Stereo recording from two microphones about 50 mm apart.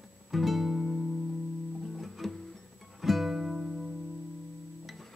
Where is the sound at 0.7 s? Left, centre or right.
Centre.